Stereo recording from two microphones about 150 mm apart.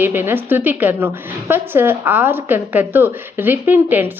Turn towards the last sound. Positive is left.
turn(degrees=-10)  # may be behind; listen again after turning